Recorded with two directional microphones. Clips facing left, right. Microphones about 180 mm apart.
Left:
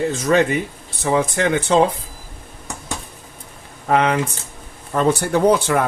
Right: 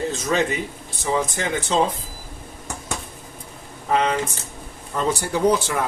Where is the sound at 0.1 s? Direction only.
60° left (ahead or behind).